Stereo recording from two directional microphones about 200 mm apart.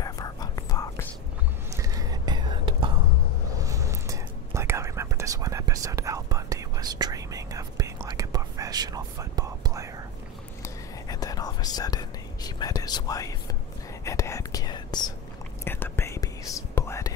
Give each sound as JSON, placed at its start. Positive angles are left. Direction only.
{"t": 0.0, "sound": "whispering", "side_deg": 20}
{"t": 1.8, "sound": "whispering", "side_deg": -15}
{"t": 10.6, "sound": "whispering", "side_deg": 20}